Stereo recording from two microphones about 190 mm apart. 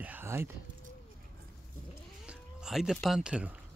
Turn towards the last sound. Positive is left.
turn(degrees=-5)  # may be behind; listen again after turning